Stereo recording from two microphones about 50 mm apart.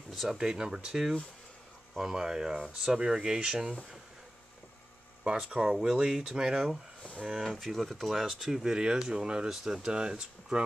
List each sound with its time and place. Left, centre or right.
0.1 s speech: centre
0.4 s speech: centre
5.2 s speech: centre
7.4 s speech: centre